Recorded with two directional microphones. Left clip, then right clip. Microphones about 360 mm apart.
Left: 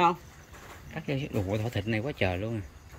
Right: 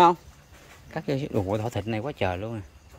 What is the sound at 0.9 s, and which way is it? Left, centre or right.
Speech, centre.